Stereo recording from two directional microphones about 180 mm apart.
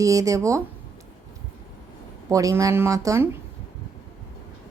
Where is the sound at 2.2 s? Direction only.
15° right (ahead or behind).